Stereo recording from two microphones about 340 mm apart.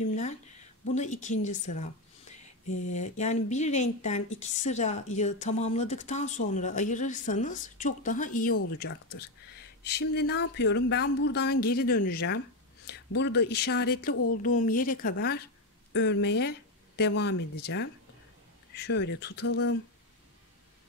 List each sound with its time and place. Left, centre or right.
0.9 s speech: left
18.9 s speech: left